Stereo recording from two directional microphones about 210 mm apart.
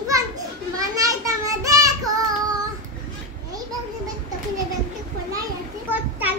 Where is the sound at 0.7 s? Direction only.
15° right (ahead or behind).